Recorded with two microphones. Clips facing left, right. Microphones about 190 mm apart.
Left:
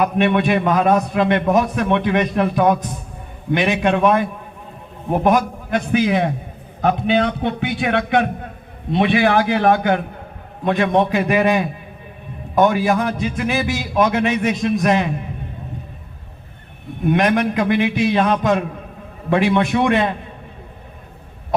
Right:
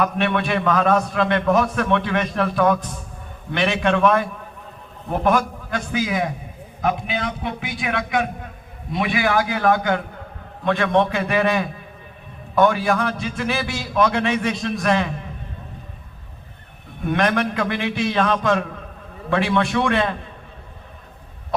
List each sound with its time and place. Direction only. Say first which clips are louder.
0.0 s a man's voice: left 4 dB; 15° left (ahead or behind)
6.1 s a man's voice: left 5 dB; 30° left (ahead or behind); by 15.0 s 15° left (ahead or behind)
17.1 s a man's voice: left 4 dB; 15° left (ahead or behind)